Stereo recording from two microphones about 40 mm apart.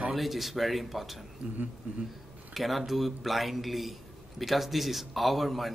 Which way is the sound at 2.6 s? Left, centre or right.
Centre.